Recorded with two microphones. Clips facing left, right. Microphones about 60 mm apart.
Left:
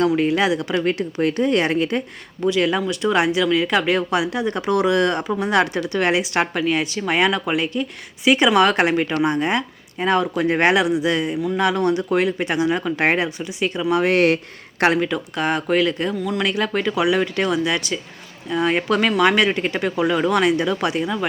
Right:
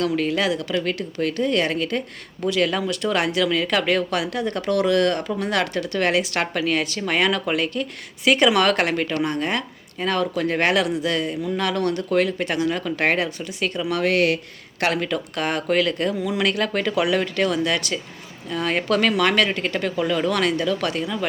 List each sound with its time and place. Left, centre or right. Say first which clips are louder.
0.2 s a woman's voice: left 3 dB; centre
2.4 s speech: left 2 dB; centre
14.0 s speech: left 2 dB; left
14.9 s speech: left 3 dB; centre